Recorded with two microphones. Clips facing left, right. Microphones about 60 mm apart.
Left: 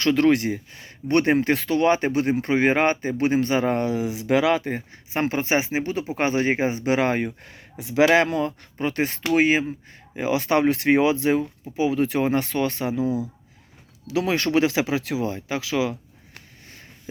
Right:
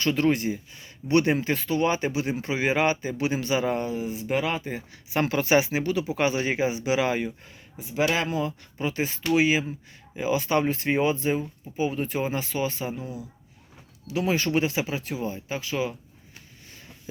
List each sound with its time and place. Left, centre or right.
0.0 s speech: left
1.5 s speech: left
3.8 s speech: left
4.7 s speech: left
7.5 s speech: left